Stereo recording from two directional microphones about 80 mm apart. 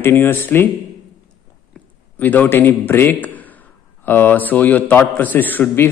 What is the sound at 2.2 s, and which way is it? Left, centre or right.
A man's voice, left.